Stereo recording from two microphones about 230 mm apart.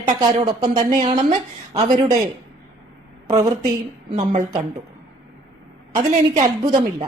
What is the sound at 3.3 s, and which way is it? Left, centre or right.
Speech, centre.